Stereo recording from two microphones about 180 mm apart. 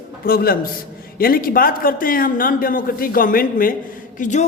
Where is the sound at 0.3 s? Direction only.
55° left (ahead or behind).